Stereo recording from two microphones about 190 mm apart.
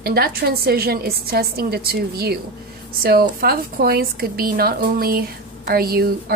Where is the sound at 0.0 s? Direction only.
55° right (ahead or behind).